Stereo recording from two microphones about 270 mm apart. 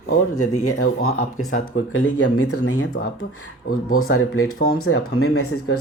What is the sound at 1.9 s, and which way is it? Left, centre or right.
Speech, left.